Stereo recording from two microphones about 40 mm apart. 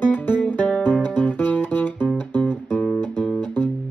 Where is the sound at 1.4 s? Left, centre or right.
Left.